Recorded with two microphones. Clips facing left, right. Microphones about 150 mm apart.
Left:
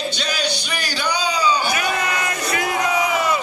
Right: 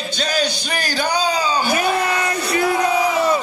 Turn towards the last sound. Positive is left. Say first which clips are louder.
# right 3 dB
turn(degrees=-30)  # may be behind; listen again after turning